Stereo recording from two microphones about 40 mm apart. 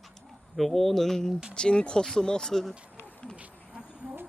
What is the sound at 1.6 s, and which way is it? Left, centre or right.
Speech, left.